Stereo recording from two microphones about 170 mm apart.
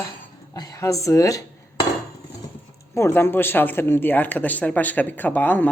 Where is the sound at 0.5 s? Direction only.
20° left (ahead or behind).